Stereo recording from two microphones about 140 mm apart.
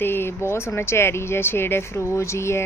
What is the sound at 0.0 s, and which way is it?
A woman's voice, 15° left (ahead or behind).